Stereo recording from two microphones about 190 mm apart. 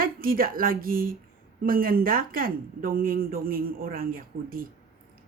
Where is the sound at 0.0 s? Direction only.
50° right (ahead or behind).